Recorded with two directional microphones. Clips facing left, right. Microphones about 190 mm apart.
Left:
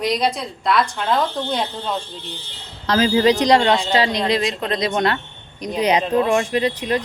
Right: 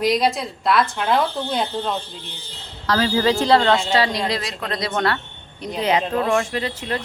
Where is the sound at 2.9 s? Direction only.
20° left (ahead or behind).